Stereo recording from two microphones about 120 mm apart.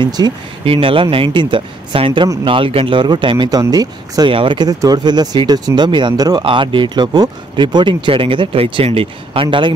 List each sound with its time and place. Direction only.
0.0 s speech: 35° right (ahead or behind)
0.7 s speech: 50° right (ahead or behind); by 4.3 s 30° right (ahead or behind)
4.3 s speech: 45° right (ahead or behind)